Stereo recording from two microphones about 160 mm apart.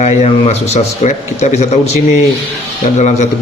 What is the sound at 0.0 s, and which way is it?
Speech, 45° left (ahead or behind).